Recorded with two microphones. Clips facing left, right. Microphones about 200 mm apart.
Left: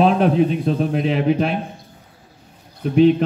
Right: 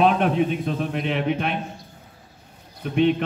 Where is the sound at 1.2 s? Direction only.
35° left (ahead or behind).